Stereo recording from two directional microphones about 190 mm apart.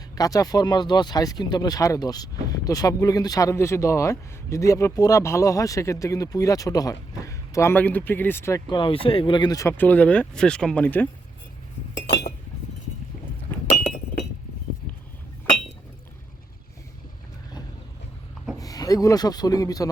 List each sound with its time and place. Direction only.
0.2 s speech: 20° left (ahead or behind)
18.6 s a man's voice: 20° left (ahead or behind)